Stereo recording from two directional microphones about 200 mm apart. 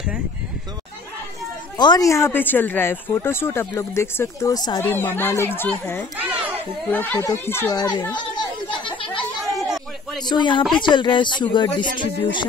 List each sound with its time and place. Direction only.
1.8 s speech: 20° left (ahead or behind)
6.1 s children playing: 10° right (ahead or behind)
6.9 s speech: 10° left (ahead or behind); by 9.2 s 25° left (ahead or behind)
9.6 s a sound: centre (ahead or behind)
10.2 s speech: 20° left (ahead or behind)